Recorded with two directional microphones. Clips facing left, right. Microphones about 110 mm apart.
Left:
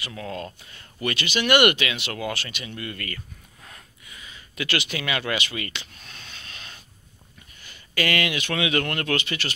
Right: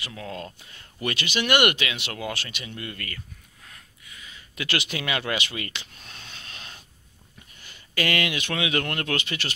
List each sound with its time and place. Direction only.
0.0 s speech: 15° right (ahead or behind)
4.6 s speech: 20° right (ahead or behind)
7.9 s speech: 20° right (ahead or behind)